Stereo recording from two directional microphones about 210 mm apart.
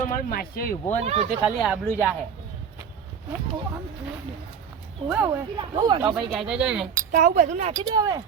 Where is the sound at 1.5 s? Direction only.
5° right (ahead or behind).